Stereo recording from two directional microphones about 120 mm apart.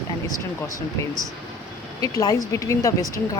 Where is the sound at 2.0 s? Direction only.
30° left (ahead or behind).